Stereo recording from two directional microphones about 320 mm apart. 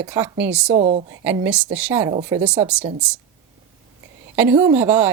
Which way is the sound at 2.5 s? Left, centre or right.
Centre.